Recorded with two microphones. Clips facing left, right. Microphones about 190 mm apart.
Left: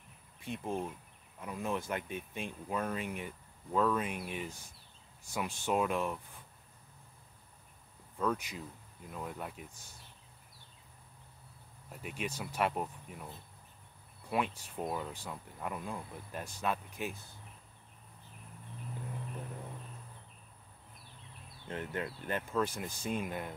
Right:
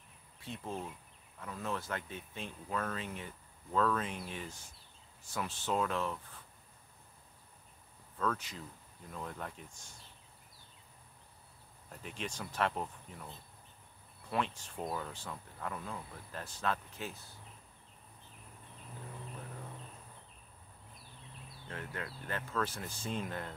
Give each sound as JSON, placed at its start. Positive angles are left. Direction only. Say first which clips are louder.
{"t": 0.4, "sound": "speech", "louder": "left 4 dB", "side_deg": 15}
{"t": 8.2, "sound": "speech", "louder": "left 2 dB", "side_deg": 15}
{"t": 11.9, "sound": "speech", "louder": "left 3 dB", "side_deg": 10}
{"t": 21.6, "sound": "speech", "louder": "left 5 dB", "side_deg": 20}